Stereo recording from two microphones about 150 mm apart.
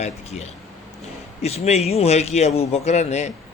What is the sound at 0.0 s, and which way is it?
Speech, 45° left (ahead or behind).